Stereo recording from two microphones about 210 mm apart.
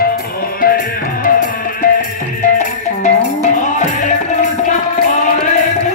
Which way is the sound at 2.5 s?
35° left (ahead or behind).